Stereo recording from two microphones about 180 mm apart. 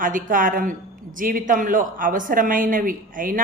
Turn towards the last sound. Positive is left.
turn(degrees=-50)  # may be behind; listen again after turning